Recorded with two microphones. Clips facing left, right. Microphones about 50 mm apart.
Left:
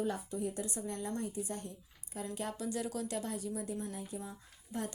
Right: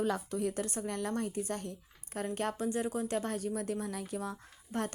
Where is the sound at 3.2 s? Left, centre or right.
Right.